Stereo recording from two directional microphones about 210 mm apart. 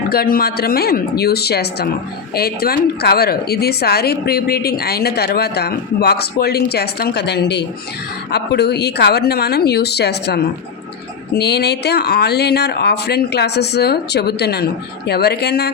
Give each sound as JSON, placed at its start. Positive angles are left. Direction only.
{"t": 0.1, "sound": "a woman's voice", "side_deg": 45}